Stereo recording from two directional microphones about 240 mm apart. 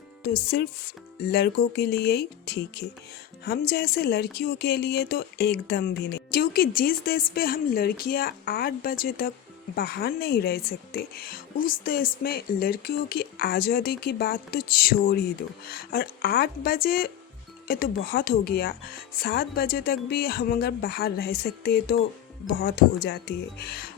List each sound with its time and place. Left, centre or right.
0.2 s speech: left